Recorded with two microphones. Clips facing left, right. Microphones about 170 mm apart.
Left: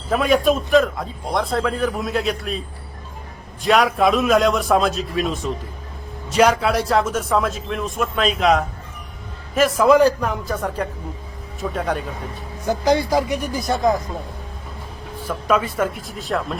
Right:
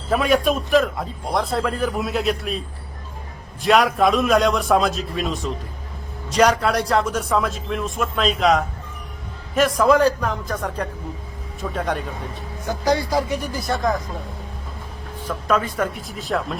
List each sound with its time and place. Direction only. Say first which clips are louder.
0.1 s a man's voice: left 1 dB; centre (ahead or behind)
12.6 s speech: left 3 dB; 20° left (ahead or behind)
15.3 s a man's voice: left 1 dB; 5° left (ahead or behind)